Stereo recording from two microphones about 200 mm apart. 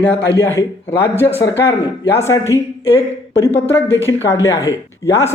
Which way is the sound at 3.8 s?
15° right (ahead or behind).